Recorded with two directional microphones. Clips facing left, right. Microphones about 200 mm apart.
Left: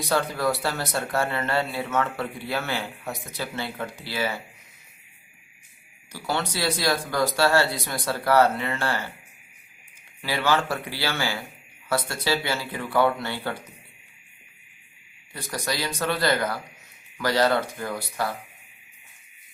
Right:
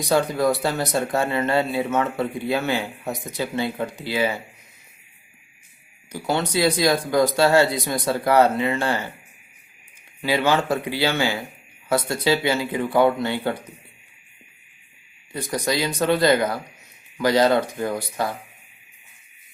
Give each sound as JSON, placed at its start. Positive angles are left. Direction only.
{"t": 0.0, "sound": "speech", "side_deg": -15}
{"t": 6.1, "sound": "speech", "side_deg": -20}
{"t": 10.2, "sound": "speech", "side_deg": -20}
{"t": 15.3, "sound": "speech", "side_deg": -20}